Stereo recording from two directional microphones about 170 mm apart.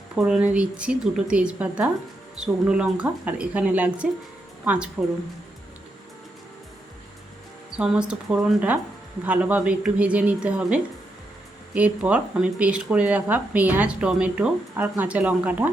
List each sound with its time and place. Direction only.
0.2 s speech: 5° right (ahead or behind)
7.8 s speech: 5° right (ahead or behind)